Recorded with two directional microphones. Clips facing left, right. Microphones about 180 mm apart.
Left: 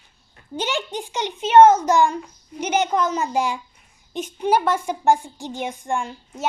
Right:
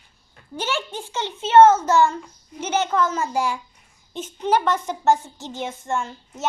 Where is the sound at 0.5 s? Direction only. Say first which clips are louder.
Left 2 dB; 15° left (ahead or behind).